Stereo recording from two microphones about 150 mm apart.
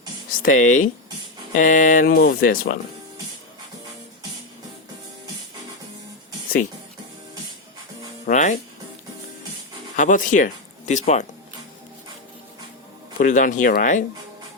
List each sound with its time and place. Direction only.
0.4 s speech: 60° left (ahead or behind); by 2.7 s 75° left (ahead or behind)
8.3 s speech: 55° left (ahead or behind)
9.9 s speech: 60° left (ahead or behind)
13.1 s speech: 60° left (ahead or behind)